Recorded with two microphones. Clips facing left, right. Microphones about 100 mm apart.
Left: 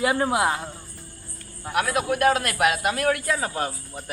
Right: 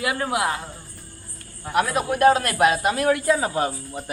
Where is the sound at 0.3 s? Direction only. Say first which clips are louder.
Left 1 dB; 20° left (ahead or behind).